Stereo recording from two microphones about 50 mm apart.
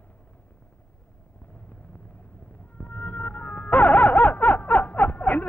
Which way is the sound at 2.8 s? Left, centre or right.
Left.